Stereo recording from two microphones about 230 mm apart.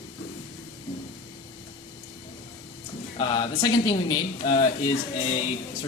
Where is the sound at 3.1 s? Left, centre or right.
Left.